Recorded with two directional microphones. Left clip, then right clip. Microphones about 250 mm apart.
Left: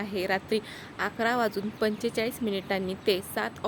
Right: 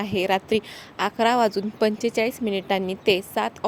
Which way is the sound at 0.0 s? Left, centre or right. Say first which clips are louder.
Right 6 dB; right.